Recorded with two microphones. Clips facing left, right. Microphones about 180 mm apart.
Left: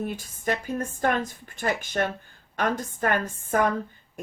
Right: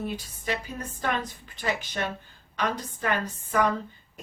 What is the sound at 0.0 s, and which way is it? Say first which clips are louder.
Speech: left 3 dB; 50° left (ahead or behind).